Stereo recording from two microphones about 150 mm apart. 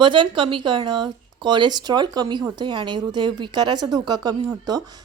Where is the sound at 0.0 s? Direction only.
35° right (ahead or behind).